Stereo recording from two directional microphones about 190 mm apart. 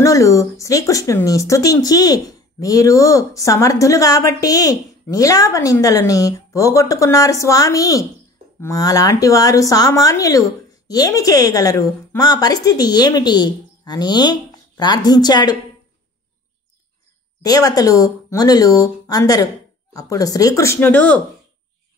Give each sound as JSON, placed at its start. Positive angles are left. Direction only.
{"t": 0.0, "sound": "speech", "side_deg": 15}
{"t": 17.4, "sound": "speech", "side_deg": 20}